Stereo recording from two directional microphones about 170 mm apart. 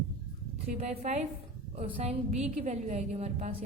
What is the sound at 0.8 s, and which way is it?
A woman's voice, 45° right (ahead or behind).